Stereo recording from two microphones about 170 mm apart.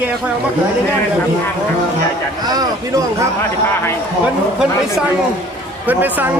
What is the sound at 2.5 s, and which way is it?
Speech, 25° right (ahead or behind).